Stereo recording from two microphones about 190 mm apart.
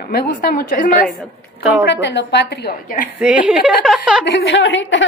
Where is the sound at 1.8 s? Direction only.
65° left (ahead or behind); by 3.1 s 50° left (ahead or behind).